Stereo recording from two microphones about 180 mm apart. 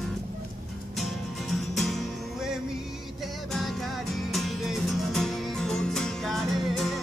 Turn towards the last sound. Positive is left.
turn(degrees=0)  # may be behind; listen again after turning